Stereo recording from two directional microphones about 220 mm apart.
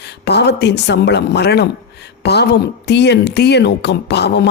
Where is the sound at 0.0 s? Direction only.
50° left (ahead or behind).